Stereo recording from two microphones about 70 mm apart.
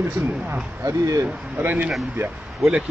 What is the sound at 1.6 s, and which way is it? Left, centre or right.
Speech, right.